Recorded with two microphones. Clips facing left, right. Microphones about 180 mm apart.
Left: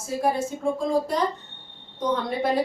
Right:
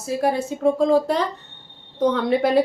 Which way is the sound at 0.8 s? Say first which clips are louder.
Right 3 dB; 70° right (ahead or behind).